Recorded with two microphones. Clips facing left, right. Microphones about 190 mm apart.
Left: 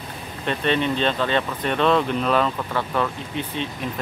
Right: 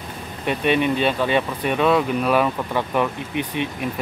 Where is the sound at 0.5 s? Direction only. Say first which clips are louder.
Right 3 dB; 10° right (ahead or behind).